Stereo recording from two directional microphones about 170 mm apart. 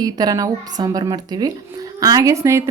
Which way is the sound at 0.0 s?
25° right (ahead or behind).